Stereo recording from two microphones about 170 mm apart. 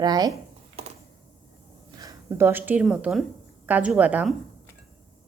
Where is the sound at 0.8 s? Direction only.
35° right (ahead or behind).